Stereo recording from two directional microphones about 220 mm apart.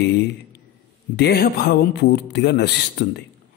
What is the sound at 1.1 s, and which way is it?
A man's voice, 45° left (ahead or behind).